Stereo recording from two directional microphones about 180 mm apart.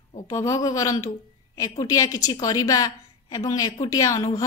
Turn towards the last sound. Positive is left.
turn(degrees=20)  # may be behind; listen again after turning